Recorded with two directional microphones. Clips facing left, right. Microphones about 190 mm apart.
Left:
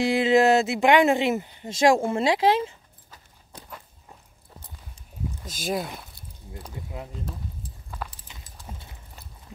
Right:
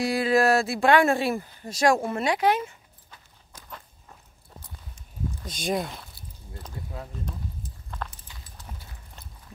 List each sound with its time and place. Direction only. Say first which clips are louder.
0.0 s speech: left 3 dB; 25° left (ahead or behind)
5.4 s speech: right 1 dB; 5° left (ahead or behind)
6.5 s speech: left 1 dB; 15° left (ahead or behind)
8.0 s clip-clop: even; 5° left (ahead or behind)
8.6 s clip-clop: left 3 dB; 25° left (ahead or behind)